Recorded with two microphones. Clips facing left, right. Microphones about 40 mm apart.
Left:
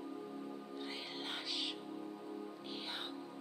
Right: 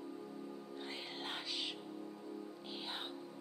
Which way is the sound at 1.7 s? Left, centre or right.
Centre.